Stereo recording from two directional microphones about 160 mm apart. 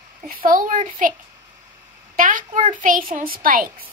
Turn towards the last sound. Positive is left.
turn(degrees=-65)  # may be behind; listen again after turning